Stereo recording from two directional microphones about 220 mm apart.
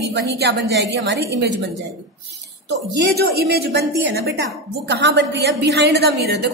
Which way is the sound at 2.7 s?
50° right (ahead or behind).